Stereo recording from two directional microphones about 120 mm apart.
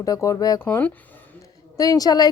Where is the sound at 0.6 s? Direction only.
15° left (ahead or behind).